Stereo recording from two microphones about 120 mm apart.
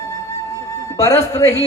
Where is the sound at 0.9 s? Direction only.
25° left (ahead or behind).